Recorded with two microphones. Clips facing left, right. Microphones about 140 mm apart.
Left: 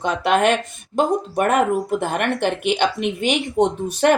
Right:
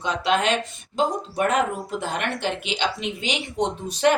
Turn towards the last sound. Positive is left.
turn(degrees=55)  # may be behind; listen again after turning